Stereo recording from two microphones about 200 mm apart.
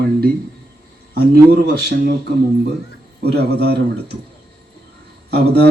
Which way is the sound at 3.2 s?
55° right (ahead or behind).